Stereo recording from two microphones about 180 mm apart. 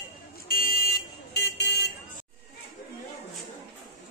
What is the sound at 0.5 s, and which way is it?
Car alarm, 55° left (ahead or behind).